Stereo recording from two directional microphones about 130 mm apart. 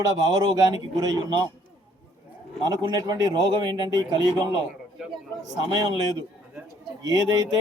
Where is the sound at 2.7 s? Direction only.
30° right (ahead or behind).